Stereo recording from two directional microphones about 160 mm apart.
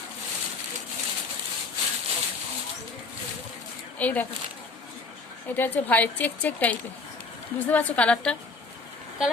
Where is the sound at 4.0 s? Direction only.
10° left (ahead or behind).